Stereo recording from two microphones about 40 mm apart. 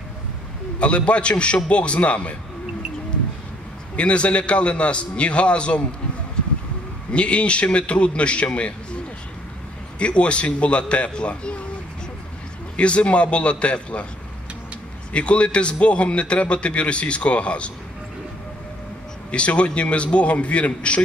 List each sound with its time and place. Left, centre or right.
0.7 s a man's voice: left
3.9 s a man's voice: left
7.1 s a man's voice: left
9.9 s a man's voice: left
12.7 s a man's voice: left
15.1 s a man's voice: left
19.3 s a man's voice: left